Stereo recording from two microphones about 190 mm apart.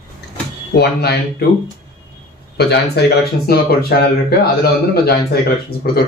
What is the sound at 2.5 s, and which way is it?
A man's voice, 60° left (ahead or behind).